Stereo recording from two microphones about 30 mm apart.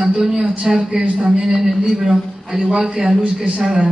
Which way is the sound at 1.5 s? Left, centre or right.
Centre.